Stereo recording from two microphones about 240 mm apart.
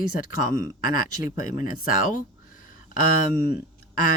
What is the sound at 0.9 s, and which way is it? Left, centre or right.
Speech, left.